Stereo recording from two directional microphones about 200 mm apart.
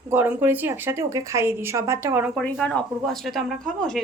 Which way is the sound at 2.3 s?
5° left (ahead or behind).